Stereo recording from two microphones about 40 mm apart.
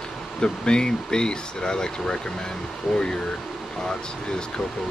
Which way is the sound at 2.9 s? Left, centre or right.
Centre.